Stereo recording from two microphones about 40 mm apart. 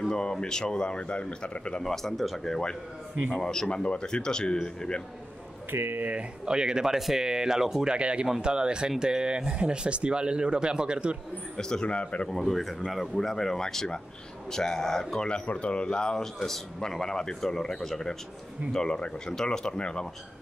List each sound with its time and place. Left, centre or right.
0.1 s a man's voice: centre
1.8 s speech: centre
3.7 s a man's voice: left
5.7 s speech: right
6.4 s speech: centre
7.9 s speech: right
11.8 s a man's voice: left
12.3 s speech: centre
15.4 s a man's voice: left